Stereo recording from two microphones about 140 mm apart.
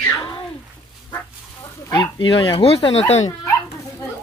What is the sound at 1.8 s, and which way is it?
Speech, 30° left (ahead or behind).